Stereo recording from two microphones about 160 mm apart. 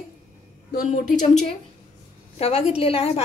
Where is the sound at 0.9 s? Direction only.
55° left (ahead or behind).